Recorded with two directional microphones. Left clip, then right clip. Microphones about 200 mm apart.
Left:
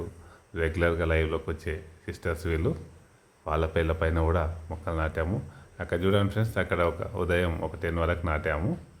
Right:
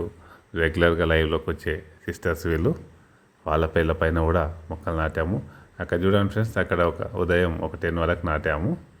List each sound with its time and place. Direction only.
0.5 s speech: 20° right (ahead or behind)